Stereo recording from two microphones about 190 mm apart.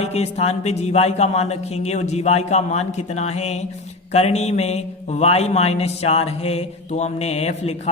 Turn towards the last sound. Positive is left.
turn(degrees=35)  # may be behind; listen again after turning